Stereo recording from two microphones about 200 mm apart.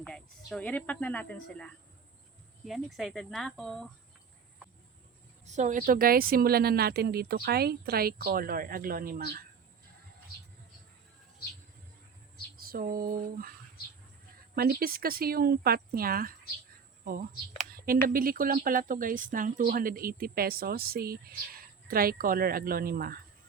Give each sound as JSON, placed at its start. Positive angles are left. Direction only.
{"t": 0.0, "sound": "speech", "side_deg": 5}
{"t": 5.5, "sound": "speech", "side_deg": -35}
{"t": 12.5, "sound": "speech", "side_deg": -45}
{"t": 14.5, "sound": "speech", "side_deg": -50}